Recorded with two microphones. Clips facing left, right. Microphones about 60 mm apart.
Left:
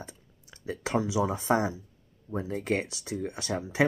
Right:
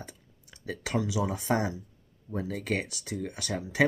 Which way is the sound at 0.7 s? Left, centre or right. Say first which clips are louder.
Left 2 dB; left.